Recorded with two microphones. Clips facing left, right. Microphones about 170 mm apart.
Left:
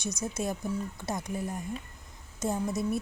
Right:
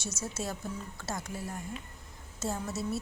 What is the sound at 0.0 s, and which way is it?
A woman's voice, 15° left (ahead or behind).